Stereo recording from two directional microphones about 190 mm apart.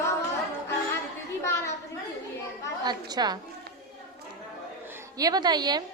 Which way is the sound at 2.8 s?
20° right (ahead or behind).